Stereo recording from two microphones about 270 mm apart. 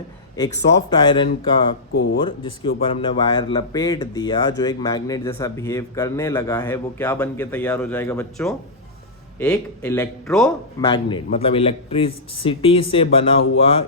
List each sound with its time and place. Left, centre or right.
0.3 s speech: centre
1.9 s speech: left
2.1 s a man's voice: centre
10.8 s speech: centre